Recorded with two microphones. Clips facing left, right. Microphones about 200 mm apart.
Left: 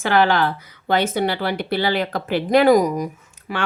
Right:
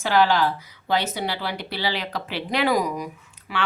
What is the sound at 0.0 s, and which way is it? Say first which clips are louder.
Speech: left 2 dB; 60° left (ahead or behind).